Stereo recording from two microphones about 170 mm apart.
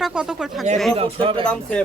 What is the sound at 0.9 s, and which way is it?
Speech, 35° right (ahead or behind).